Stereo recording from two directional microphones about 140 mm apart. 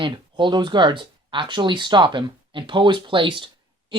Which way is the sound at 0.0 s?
35° right (ahead or behind).